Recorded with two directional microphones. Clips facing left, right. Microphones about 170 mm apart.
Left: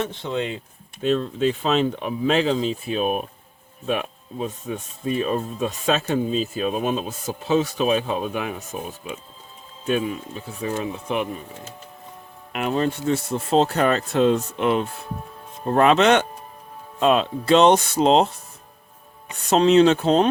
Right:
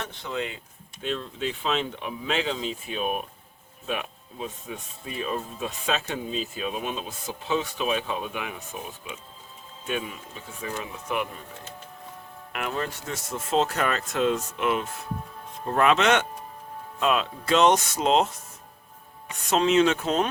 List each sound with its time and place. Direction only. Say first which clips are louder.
0.0 s speech: left 6 dB; 25° left (ahead or behind)
1.0 s speech: left 9 dB; 40° left (ahead or behind); by 11.4 s 20° left (ahead or behind)
12.5 s speech: left 8 dB; 25° left (ahead or behind)
19.5 s speech: left 6 dB; 35° left (ahead or behind)